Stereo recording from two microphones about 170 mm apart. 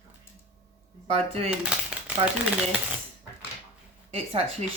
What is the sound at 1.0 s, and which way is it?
Speech, 35° right (ahead or behind).